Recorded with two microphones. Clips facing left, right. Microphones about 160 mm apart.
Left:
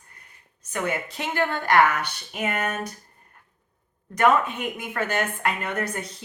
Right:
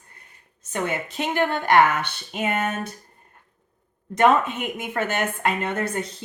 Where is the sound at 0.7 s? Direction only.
25° right (ahead or behind).